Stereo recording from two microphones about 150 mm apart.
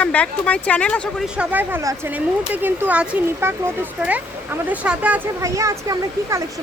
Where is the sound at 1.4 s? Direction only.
10° right (ahead or behind).